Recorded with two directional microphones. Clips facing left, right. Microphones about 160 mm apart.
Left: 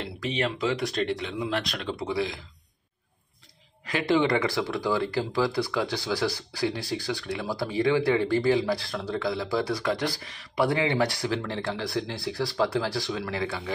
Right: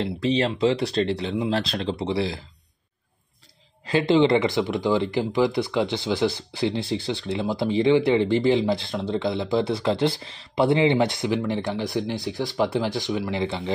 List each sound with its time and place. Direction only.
0.0 s speech: 30° right (ahead or behind)
3.8 s speech: 25° right (ahead or behind)